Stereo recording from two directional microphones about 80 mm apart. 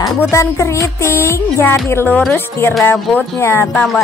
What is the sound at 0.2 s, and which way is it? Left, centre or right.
A woman's voice, left.